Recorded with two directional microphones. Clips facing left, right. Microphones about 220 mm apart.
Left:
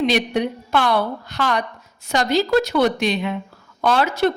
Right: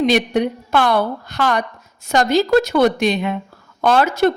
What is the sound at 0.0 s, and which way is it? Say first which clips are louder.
A woman's voice: right 3 dB; 45° right (ahead or behind).